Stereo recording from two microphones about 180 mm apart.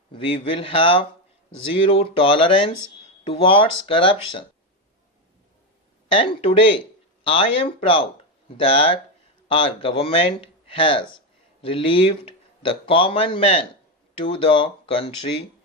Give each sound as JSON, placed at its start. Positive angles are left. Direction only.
{"t": 0.1, "sound": "a man's voice", "side_deg": 30}
{"t": 6.1, "sound": "a man's voice", "side_deg": 30}